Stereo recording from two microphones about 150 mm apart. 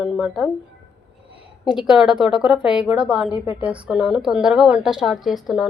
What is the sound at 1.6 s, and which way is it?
A woman's voice, 5° right (ahead or behind).